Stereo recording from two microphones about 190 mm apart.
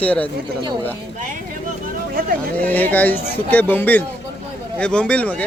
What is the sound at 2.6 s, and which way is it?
Speech, 10° left (ahead or behind).